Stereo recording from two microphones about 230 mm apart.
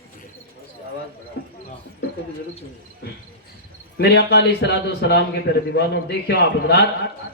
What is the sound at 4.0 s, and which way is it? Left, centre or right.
A man's voice, left.